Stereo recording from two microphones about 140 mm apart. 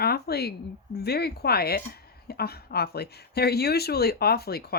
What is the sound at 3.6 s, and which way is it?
Speech, 90° left.